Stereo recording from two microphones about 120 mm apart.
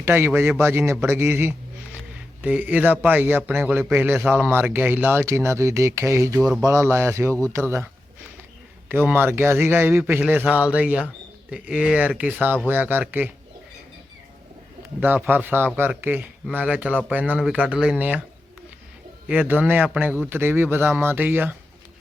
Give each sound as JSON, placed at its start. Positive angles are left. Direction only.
{"t": 0.0, "sound": "a man's voice", "side_deg": -20}
{"t": 8.9, "sound": "a man's voice", "side_deg": -15}
{"t": 15.0, "sound": "a man's voice", "side_deg": -15}
{"t": 19.3, "sound": "a man's voice", "side_deg": -10}